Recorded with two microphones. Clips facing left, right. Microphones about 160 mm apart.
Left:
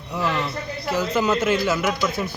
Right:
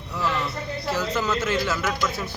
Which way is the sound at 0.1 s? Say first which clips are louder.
Left 2 dB; 15° left (ahead or behind).